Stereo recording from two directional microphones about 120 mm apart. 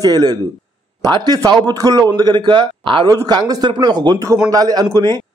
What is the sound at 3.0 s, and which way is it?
A man's voice, 30° right (ahead or behind).